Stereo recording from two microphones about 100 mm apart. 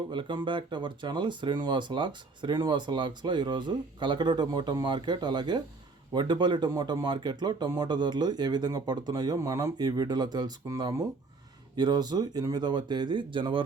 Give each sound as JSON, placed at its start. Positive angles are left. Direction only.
{"t": 0.1, "sound": "speech", "side_deg": -50}